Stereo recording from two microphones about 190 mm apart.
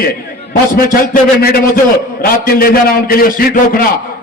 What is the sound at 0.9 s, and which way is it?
A man's voice, 50° left (ahead or behind).